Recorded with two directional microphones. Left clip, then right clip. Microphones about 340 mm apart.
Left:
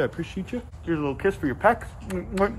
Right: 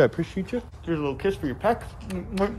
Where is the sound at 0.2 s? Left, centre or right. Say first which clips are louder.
Right 3 dB; centre.